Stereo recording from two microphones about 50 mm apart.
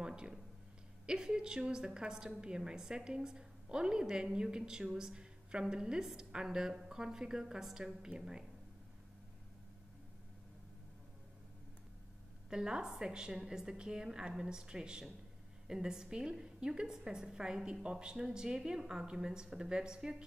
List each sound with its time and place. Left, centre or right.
0.0 s a sound: centre
1.0 s a woman's voice: centre
12.4 s a woman's voice: centre